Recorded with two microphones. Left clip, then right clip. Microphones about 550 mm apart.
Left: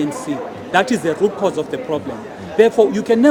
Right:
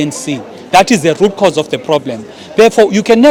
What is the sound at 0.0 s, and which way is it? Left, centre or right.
Speech, right.